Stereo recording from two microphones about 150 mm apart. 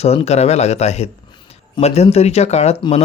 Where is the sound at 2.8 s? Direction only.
35° left (ahead or behind).